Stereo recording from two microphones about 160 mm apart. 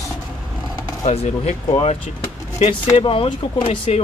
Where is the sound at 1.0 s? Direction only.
40° left (ahead or behind).